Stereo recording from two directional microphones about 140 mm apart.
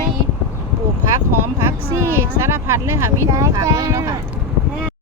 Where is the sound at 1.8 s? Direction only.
15° right (ahead or behind).